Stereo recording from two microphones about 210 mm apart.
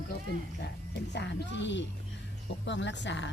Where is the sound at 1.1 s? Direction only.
55° left (ahead or behind).